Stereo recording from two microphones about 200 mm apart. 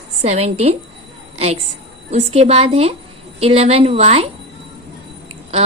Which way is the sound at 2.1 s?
30° right (ahead or behind).